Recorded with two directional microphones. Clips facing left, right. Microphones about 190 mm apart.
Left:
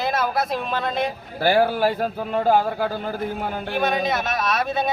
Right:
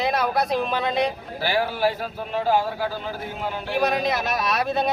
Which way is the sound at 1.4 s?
50° left (ahead or behind).